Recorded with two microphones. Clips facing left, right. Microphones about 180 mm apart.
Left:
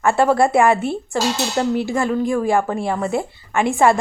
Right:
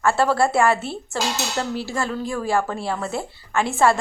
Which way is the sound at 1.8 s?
15° left (ahead or behind).